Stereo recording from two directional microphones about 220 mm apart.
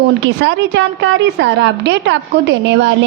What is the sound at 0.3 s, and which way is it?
A woman's voice, 55° right (ahead or behind).